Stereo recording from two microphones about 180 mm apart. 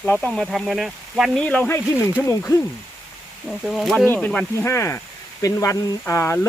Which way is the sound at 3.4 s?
Centre (ahead or behind).